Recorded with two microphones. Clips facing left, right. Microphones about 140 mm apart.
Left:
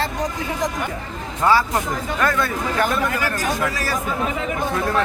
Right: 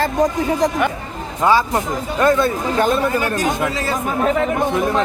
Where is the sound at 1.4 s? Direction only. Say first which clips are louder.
Right 2 dB; 20° right (ahead or behind).